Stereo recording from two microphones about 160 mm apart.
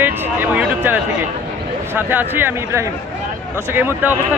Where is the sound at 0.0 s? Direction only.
10° right (ahead or behind).